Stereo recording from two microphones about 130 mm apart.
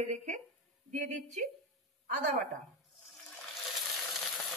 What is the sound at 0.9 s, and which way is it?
Speech, 75° right (ahead or behind).